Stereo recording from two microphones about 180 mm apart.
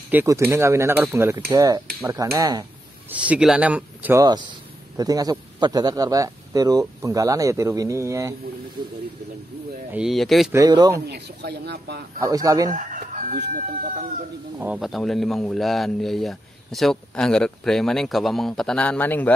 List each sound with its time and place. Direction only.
0.1 s a man's voice: 15° right (ahead or behind)
3.1 s a man's voice: 5° right (ahead or behind)
9.9 s speech: centre (ahead or behind)
10.5 s a man's voice: 20° right (ahead or behind)
11.1 s speech: 65° right (ahead or behind)
12.2 s a man's voice: 20° right (ahead or behind)
12.7 s chicken: 45° right (ahead or behind)
13.5 s speech: 50° right (ahead or behind)
14.6 s speech: 5° right (ahead or behind)